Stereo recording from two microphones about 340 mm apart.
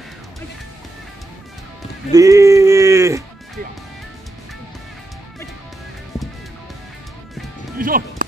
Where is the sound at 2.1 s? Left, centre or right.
Centre.